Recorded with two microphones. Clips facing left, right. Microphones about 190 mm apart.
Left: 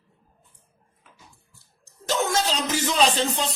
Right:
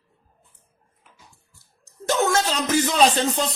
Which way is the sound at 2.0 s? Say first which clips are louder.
Right 3 dB; 50° right (ahead or behind).